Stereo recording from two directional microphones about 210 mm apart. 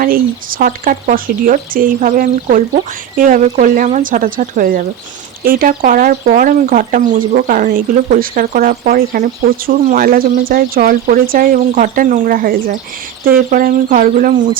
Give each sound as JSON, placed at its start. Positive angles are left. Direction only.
{"t": 0.0, "sound": "speech", "side_deg": -45}